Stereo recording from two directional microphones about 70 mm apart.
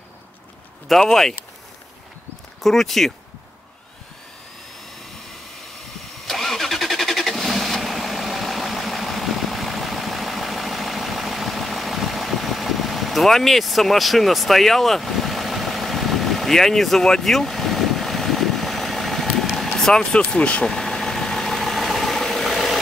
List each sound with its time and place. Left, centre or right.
0.8 s speech: centre
2.6 s speech: centre
6.2 s vehicle: centre
20.2 s speech: centre
20.6 s vehicle: centre